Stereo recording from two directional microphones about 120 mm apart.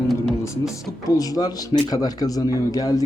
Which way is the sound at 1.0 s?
30° left (ahead or behind).